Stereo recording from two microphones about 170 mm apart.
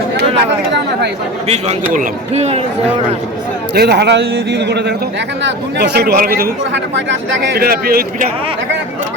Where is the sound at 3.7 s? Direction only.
75° right (ahead or behind).